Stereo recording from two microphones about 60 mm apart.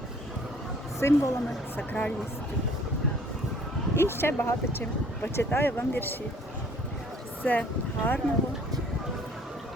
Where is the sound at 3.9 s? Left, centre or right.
Left.